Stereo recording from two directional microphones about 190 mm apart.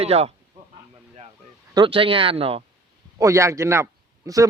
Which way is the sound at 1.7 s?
25° right (ahead or behind).